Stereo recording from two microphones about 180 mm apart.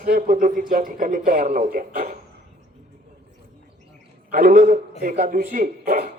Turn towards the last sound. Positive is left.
turn(degrees=-55)  # may be behind; listen again after turning